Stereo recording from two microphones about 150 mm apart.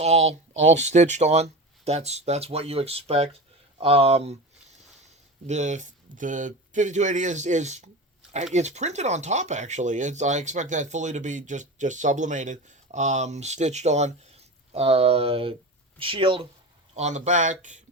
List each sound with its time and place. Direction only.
0.0 s speech: 45° right (ahead or behind)
5.5 s speech: 50° right (ahead or behind); by 16.5 s 35° right (ahead or behind)
16.9 s speech: 50° right (ahead or behind)